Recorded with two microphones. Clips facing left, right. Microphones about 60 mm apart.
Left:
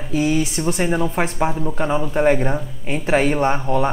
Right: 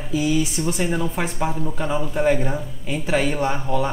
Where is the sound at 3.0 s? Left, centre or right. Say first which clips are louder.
Left 4 dB; left.